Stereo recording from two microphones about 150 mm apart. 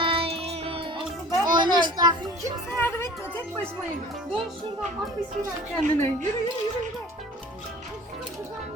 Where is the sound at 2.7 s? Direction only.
15° left (ahead or behind).